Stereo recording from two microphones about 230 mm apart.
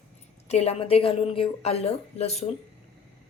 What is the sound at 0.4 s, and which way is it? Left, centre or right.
A woman's voice, left.